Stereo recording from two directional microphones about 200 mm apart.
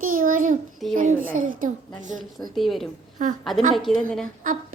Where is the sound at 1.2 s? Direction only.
40° right (ahead or behind).